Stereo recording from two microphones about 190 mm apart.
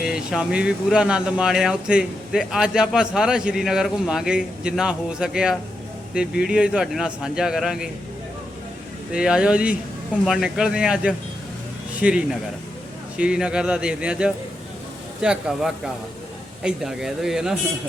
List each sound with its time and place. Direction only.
0.0 s speech: 5° right (ahead or behind)
9.1 s speech: 5° right (ahead or behind)